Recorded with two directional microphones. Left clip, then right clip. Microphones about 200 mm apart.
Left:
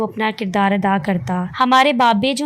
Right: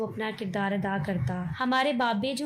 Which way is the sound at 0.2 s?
45° left (ahead or behind).